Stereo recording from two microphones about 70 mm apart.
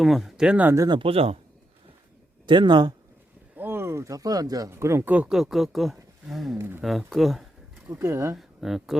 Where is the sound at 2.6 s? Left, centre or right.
Right.